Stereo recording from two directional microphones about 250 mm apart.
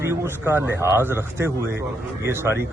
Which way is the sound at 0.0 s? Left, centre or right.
Centre.